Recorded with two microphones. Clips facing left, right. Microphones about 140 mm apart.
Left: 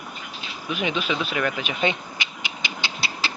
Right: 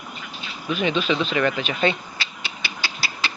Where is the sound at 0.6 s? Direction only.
15° left (ahead or behind).